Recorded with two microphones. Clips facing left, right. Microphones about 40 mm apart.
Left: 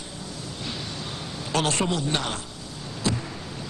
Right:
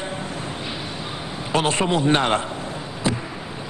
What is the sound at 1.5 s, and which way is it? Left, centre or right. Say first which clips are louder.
Speech: right 4 dB; right.